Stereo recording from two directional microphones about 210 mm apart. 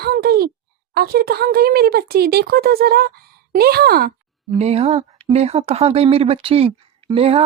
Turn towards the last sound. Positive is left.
turn(degrees=-25)  # may be behind; listen again after turning